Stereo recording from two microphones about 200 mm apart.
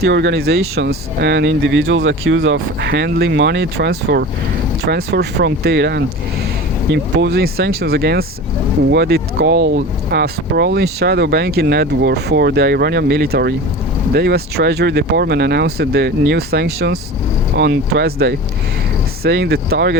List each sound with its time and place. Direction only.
0.0 s speech: 60° right (ahead or behind)